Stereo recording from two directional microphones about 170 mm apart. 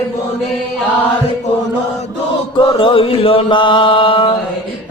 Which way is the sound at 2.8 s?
30° left (ahead or behind).